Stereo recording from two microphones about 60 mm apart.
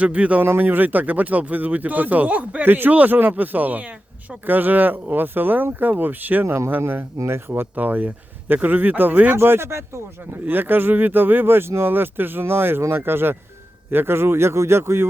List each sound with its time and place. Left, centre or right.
0.0 s speech: right
0.4 s speech: right
9.4 s speech: right
10.4 s speech: right